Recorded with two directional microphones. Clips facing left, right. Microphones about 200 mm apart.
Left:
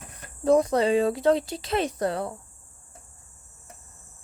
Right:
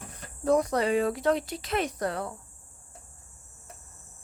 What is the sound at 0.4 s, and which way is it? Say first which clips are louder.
Speech: left 4 dB; 25° left (ahead or behind).